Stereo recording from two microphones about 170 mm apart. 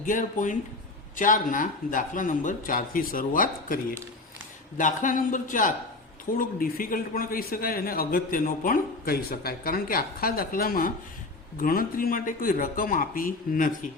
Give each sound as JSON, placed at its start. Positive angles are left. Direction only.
{"t": 0.0, "sound": "speech", "side_deg": 50}
{"t": 4.8, "sound": "a man's voice", "side_deg": 50}